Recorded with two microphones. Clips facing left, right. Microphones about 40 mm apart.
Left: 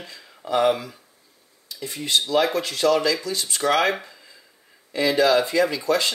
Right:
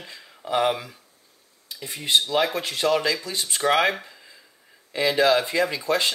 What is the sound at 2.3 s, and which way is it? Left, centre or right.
Speech, centre.